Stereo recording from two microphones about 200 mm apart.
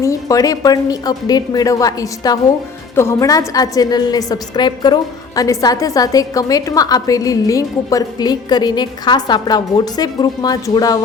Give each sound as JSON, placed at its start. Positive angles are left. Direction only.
{"t": 0.0, "sound": "a woman's voice", "side_deg": 15}